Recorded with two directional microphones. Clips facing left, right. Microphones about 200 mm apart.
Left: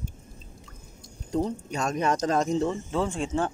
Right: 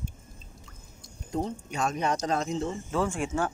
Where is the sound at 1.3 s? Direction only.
40° left (ahead or behind).